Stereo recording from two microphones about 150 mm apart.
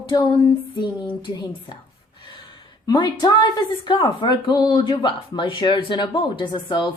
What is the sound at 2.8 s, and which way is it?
A woman's voice, 25° left (ahead or behind).